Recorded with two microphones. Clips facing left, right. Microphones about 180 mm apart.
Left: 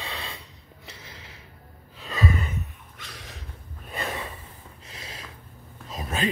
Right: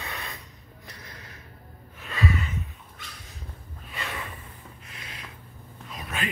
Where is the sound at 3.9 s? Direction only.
40° left (ahead or behind).